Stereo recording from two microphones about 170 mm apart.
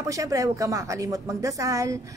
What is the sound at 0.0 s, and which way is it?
A woman's voice, 20° right (ahead or behind).